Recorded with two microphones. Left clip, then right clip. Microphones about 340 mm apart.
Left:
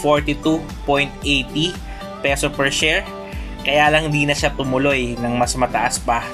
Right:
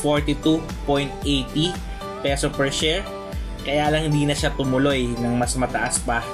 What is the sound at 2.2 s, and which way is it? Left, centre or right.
Speech, left.